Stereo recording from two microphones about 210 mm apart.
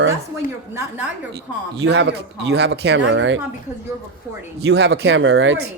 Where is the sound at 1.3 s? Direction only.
50° right (ahead or behind).